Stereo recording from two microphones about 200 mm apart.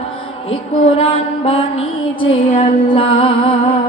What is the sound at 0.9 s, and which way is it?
Mantra, 30° left (ahead or behind).